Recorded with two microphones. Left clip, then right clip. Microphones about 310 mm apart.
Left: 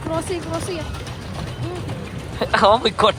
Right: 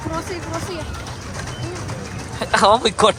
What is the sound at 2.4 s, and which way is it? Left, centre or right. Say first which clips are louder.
Speech: right 1 dB; centre.